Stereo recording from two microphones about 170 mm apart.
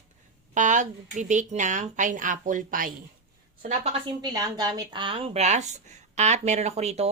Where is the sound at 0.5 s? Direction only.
45° right (ahead or behind).